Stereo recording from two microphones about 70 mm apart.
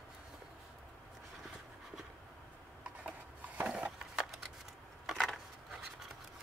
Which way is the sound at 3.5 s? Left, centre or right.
Centre.